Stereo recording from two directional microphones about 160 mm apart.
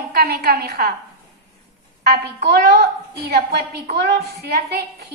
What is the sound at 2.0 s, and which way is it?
A woman's voice, 85° right.